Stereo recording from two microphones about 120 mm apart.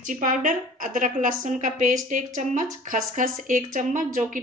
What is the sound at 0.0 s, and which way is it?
Speech, 90° right.